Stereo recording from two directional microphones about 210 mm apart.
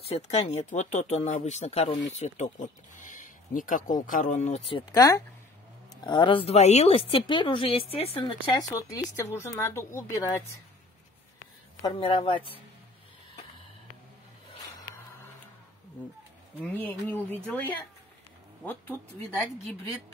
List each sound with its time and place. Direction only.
0.1 s speech: 30° left (ahead or behind); by 10.2 s 15° left (ahead or behind)
11.8 s speech: 25° left (ahead or behind)
16.6 s speech: 10° left (ahead or behind)